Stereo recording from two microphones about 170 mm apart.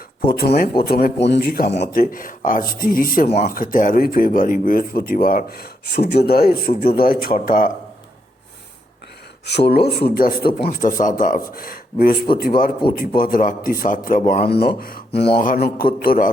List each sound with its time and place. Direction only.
0.3 s speech: 65° left (ahead or behind)
3.2 s speech: 40° left (ahead or behind)
3.5 s speech: 55° left (ahead or behind)
9.5 s speech: 75° left (ahead or behind); by 14.5 s 50° left (ahead or behind)
14.5 s speech: 65° left (ahead or behind)
15.4 s speech: 60° left (ahead or behind)